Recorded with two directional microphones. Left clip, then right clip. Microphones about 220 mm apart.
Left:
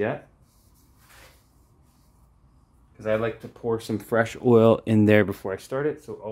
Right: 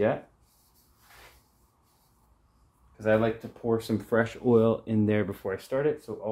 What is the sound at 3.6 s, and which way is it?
Speech, 25° left (ahead or behind).